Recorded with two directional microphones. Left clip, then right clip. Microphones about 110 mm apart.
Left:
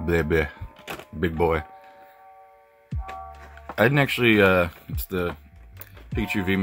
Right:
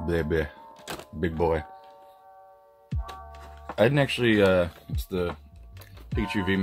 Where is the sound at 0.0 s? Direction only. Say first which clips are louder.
Left 4 dB; 40° left (ahead or behind).